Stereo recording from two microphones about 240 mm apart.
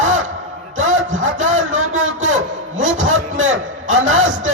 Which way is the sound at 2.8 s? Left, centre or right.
Right.